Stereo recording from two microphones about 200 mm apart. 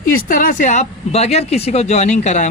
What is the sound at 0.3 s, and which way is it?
Speech, 40° left (ahead or behind).